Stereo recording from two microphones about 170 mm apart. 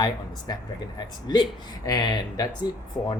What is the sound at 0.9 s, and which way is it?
Speech, 25° left (ahead or behind).